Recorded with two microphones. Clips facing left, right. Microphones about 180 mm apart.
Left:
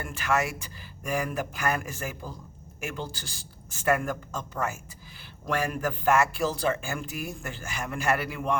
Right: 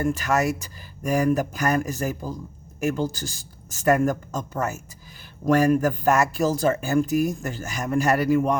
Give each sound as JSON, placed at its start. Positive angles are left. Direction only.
{"t": 0.0, "sound": "speech", "side_deg": -40}